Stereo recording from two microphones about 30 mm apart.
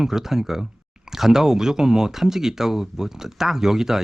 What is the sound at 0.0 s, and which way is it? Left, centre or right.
Speech, centre.